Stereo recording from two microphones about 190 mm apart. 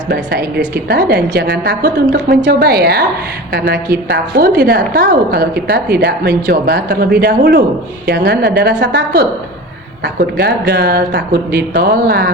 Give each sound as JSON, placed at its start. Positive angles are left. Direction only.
{"t": 0.1, "sound": "a woman's voice", "side_deg": -55}